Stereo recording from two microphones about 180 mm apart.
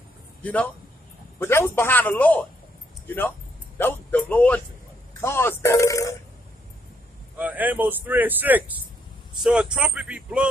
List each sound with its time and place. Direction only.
0.4 s a man's voice: 5° left (ahead or behind)
7.3 s speech: 10° right (ahead or behind)